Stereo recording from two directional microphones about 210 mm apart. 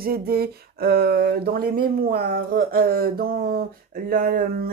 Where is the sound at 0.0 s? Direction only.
45° right (ahead or behind).